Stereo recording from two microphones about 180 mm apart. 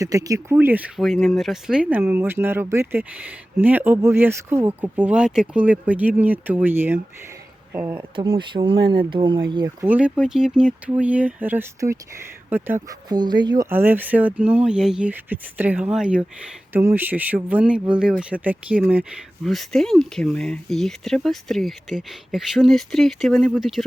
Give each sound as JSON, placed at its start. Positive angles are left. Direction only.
{"t": 0.0, "sound": "a woman's voice", "side_deg": -20}
{"t": 7.9, "sound": "speech", "side_deg": -25}
{"t": 9.8, "sound": "speech", "side_deg": -10}
{"t": 13.1, "sound": "speech", "side_deg": -25}